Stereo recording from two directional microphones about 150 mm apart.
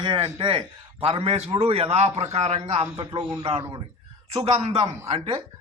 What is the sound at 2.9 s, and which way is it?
Speech, 30° right (ahead or behind).